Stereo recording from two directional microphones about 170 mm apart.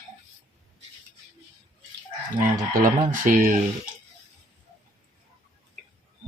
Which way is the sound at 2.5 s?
55° right (ahead or behind).